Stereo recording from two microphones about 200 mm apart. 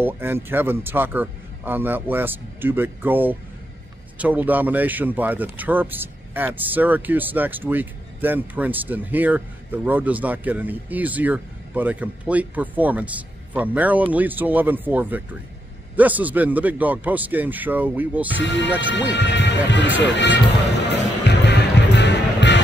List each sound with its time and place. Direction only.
0.0 s speech: 10° right (ahead or behind)
18.4 s speech: 65° left (ahead or behind)
21.3 s music: 60° left (ahead or behind)